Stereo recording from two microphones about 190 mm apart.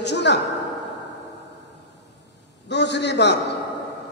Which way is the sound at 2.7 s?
65° left (ahead or behind).